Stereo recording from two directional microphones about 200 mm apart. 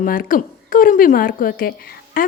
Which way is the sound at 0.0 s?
45° left (ahead or behind).